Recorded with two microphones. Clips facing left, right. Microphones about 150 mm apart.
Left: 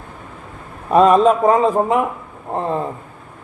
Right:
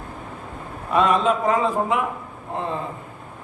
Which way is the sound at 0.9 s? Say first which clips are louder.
Left 7 dB; 40° left (ahead or behind).